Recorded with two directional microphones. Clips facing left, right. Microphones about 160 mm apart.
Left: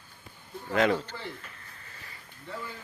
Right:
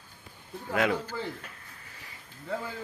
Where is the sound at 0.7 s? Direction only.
5° right (ahead or behind).